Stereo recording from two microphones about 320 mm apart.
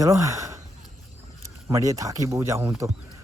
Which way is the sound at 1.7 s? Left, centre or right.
Centre.